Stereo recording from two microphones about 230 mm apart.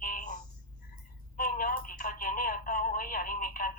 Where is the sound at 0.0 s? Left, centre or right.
Left.